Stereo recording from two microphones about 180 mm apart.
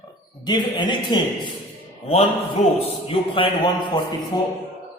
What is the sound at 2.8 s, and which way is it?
A man's voice, 30° left (ahead or behind).